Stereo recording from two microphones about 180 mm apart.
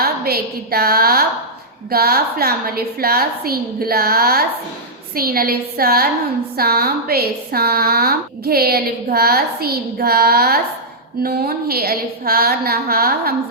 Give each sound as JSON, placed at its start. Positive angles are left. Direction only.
{"t": 0.0, "sound": "a woman's voice", "side_deg": -60}